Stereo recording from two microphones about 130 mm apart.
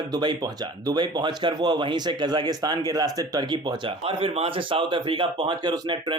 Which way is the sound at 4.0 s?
45° right (ahead or behind).